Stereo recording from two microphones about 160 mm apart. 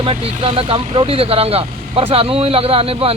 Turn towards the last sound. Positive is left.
turn(degrees=-35)  # may be behind; listen again after turning